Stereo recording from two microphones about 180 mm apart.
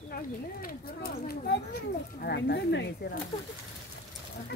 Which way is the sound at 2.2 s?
65° left (ahead or behind).